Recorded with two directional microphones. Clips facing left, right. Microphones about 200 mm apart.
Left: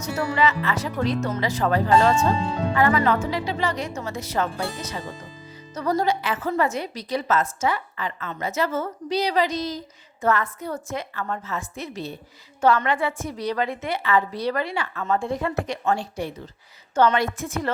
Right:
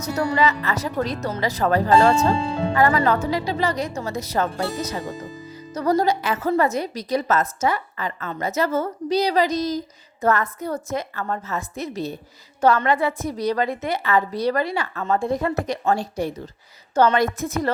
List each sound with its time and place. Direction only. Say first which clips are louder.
0.0 s a woman's voice: right 2 dB; 40° right (ahead or behind)